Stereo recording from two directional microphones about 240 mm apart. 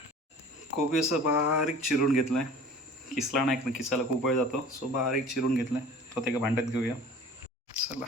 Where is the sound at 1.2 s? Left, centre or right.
Left.